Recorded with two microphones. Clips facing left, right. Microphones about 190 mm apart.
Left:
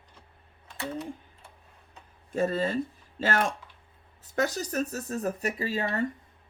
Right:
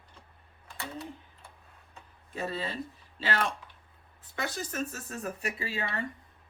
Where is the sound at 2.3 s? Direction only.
45° left (ahead or behind).